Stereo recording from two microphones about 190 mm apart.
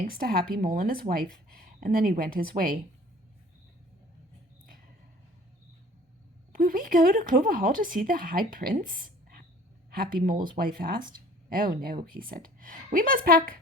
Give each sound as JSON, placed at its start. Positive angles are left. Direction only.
{"t": 0.1, "sound": "speech", "side_deg": -50}
{"t": 6.5, "sound": "speech", "side_deg": -50}